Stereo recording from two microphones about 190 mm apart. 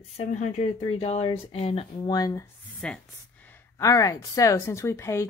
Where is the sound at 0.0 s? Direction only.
35° left (ahead or behind); by 2.5 s 20° left (ahead or behind).